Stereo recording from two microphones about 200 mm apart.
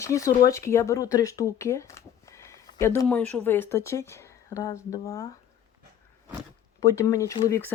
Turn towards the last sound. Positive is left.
turn(degrees=15)  # may be behind; listen again after turning